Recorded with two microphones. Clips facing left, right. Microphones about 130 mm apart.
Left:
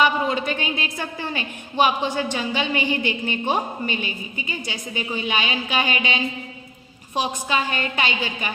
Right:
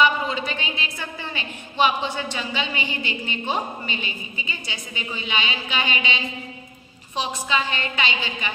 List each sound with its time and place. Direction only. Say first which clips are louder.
0.0 s a woman's voice: left 1 dB; 45° left (ahead or behind)